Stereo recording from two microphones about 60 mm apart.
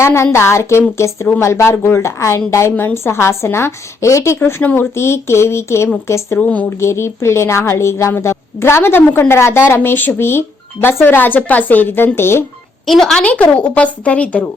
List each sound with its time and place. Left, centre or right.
0.0 s a woman's voice: left
2.7 s a woman's voice: left
6.4 s a woman's voice: left
6.7 s a woman's voice: left
12.8 s a woman's voice: centre
13.2 s a woman's voice: left